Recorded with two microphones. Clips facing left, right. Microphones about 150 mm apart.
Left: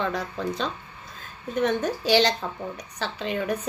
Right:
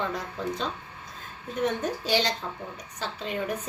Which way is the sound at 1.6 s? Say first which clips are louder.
Left 3 dB; 85° left.